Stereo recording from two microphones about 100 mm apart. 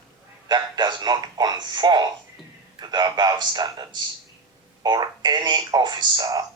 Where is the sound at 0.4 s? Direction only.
45° right (ahead or behind).